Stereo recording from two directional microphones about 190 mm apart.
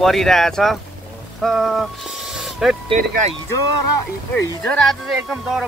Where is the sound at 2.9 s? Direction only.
35° right (ahead or behind).